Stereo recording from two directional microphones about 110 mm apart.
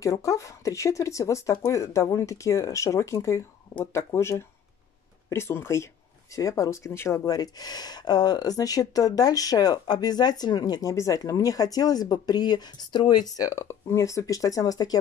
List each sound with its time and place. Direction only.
0.0 s speech: 30° left (ahead or behind)